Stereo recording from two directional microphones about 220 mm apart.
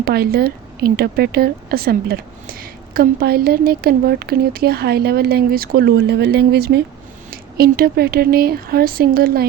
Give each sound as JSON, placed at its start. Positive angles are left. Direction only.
{"t": 0.0, "sound": "speech", "side_deg": -45}